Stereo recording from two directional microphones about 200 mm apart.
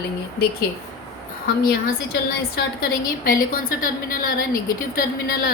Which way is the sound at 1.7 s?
50° left (ahead or behind).